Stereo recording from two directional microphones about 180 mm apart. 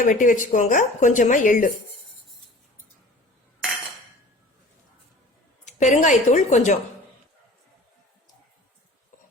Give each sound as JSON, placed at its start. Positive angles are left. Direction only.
{"t": 0.0, "sound": "speech", "side_deg": 45}
{"t": 5.6, "sound": "a woman's voice", "side_deg": 40}